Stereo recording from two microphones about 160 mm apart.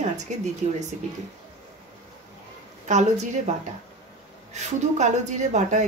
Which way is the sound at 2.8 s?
45° right (ahead or behind).